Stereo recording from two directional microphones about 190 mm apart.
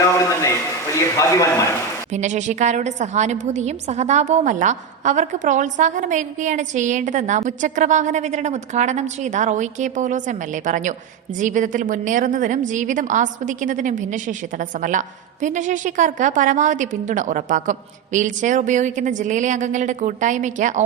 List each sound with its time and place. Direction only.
0.0 s a sound: 15° left (ahead or behind)
1.1 s speech: 15° left (ahead or behind)
2.1 s a woman's voice: 40° right (ahead or behind)